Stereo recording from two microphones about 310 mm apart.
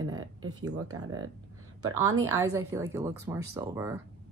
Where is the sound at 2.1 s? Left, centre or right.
Right.